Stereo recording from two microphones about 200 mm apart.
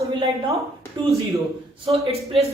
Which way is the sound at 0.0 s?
25° right (ahead or behind).